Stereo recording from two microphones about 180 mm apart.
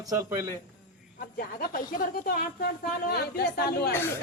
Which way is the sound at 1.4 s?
55° left (ahead or behind).